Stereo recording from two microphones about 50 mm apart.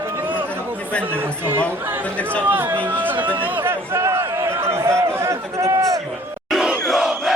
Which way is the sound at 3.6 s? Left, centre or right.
Right.